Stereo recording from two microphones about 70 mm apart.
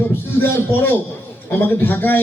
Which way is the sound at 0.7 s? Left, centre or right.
Left.